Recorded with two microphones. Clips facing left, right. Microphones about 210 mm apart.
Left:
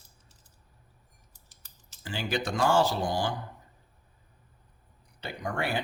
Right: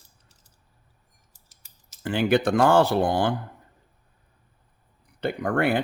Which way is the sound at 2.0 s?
60° right (ahead or behind).